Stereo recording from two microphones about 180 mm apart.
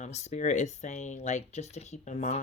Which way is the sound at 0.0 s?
40° left (ahead or behind).